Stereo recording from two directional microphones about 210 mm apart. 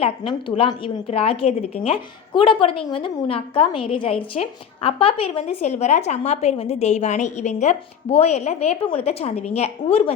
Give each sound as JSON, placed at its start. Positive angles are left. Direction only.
{"t": 0.0, "sound": "a woman's voice", "side_deg": 25}